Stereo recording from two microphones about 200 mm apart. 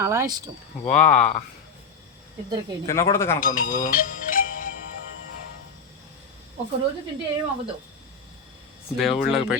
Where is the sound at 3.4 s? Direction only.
45° left (ahead or behind).